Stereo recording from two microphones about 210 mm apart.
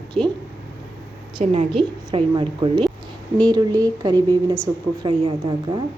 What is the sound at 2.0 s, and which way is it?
A woman's voice, 25° right (ahead or behind).